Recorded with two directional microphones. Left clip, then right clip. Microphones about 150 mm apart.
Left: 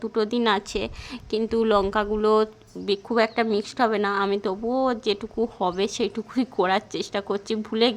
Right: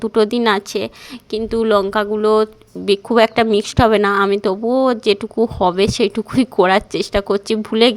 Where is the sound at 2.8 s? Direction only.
40° right (ahead or behind).